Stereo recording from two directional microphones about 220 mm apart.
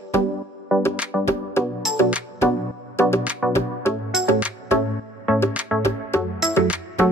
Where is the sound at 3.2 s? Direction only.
5° right (ahead or behind).